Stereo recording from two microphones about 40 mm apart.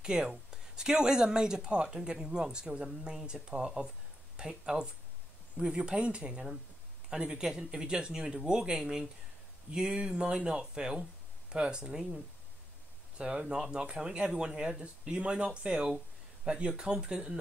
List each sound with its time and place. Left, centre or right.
0.0 s speech: centre
13.2 s speech: right